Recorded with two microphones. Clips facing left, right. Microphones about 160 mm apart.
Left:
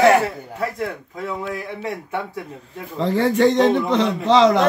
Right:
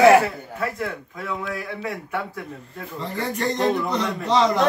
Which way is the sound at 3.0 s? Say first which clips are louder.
Left 10 dB; 90° left.